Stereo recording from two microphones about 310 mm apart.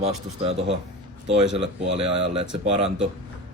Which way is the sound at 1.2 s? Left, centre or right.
Right.